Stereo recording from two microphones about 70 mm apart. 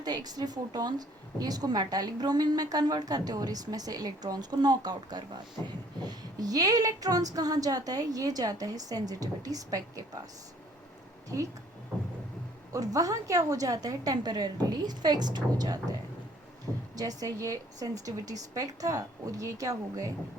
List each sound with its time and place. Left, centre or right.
0.0 s a woman's voice: right
12.7 s a woman's voice: right
16.7 s a sound: centre
17.0 s a woman's voice: right